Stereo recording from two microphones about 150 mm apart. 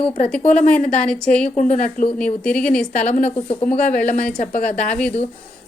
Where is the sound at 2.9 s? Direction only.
55° left (ahead or behind).